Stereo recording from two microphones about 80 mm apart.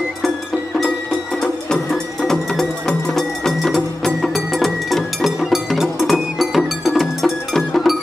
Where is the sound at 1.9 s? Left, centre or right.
Centre.